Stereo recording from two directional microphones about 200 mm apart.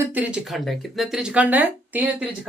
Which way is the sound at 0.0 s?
10° right (ahead or behind).